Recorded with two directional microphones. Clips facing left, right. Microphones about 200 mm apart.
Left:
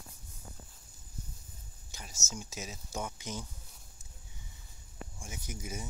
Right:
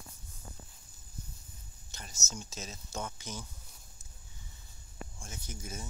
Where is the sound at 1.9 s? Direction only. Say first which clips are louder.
Left 1 dB; 10° left (ahead or behind).